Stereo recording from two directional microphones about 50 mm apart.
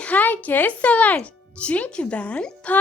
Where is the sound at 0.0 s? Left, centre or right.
Left.